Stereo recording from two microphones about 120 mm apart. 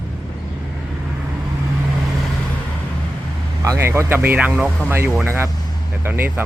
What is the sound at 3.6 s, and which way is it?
Speech, 20° right (ahead or behind).